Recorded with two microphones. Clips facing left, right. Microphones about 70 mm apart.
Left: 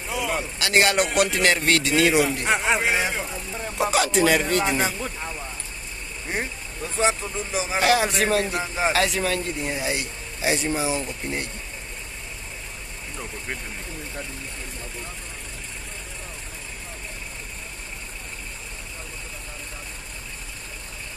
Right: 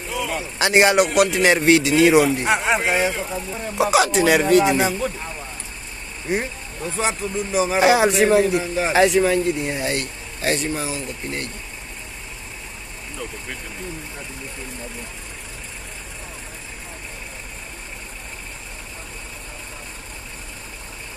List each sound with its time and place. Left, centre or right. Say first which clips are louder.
0.6 s a man's voice: right 5 dB; right
0.9 s speech: right 5 dB; centre
7.0 s speech: even; centre
7.8 s a man's voice: right 5 dB; centre
10.9 s speech: left 1 dB; centre